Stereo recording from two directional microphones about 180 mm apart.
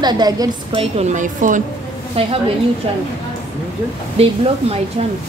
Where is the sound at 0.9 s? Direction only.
40° right (ahead or behind).